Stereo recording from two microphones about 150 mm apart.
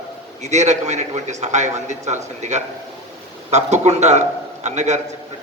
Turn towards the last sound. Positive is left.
turn(degrees=-50)  # may be behind; listen again after turning